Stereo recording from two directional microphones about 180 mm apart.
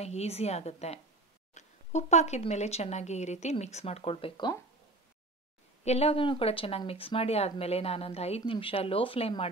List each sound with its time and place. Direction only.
0.0 s speech: 35° left (ahead or behind)
5.9 s speech: 35° left (ahead or behind)